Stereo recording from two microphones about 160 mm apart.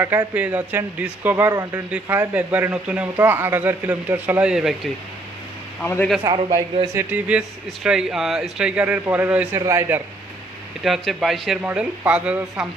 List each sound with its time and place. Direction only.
0.3 s a man's voice: 10° right (ahead or behind)
5.8 s a man's voice: 5° left (ahead or behind)
6.2 s a man's voice: 25° right (ahead or behind)
6.9 s a man's voice: 10° right (ahead or behind)
10.8 s speech: centre (ahead or behind)